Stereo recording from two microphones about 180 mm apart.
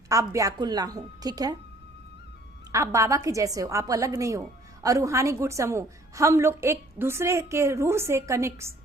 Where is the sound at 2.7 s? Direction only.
15° right (ahead or behind).